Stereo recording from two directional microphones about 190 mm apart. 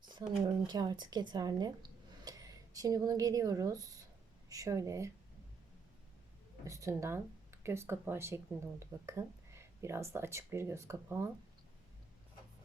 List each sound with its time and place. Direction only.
0.0 s a sound: 25° right (ahead or behind)
0.7 s a woman's voice: 20° right (ahead or behind)
6.7 s speech: 15° right (ahead or behind)